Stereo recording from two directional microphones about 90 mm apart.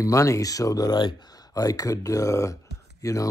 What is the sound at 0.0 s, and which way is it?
Speech, 35° left (ahead or behind).